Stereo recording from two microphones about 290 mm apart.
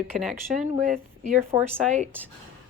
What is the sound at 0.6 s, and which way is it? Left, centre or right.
Speech, right.